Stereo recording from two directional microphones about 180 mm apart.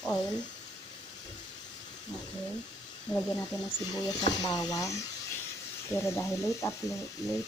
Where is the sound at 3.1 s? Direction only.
25° left (ahead or behind).